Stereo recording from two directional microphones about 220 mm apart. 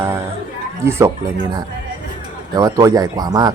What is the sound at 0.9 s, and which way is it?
Speech, 10° right (ahead or behind).